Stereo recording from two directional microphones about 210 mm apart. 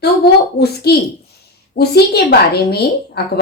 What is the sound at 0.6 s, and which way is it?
Speech, 50° left (ahead or behind).